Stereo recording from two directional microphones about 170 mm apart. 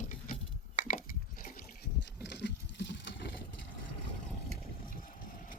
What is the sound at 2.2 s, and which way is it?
Patter, 85° left.